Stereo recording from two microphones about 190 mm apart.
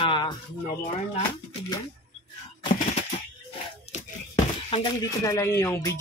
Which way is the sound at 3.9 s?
35° left (ahead or behind).